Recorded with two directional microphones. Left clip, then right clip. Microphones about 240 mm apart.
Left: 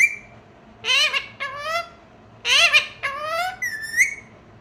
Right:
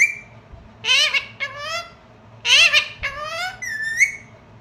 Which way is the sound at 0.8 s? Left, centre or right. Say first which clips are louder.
Right 2 dB; centre.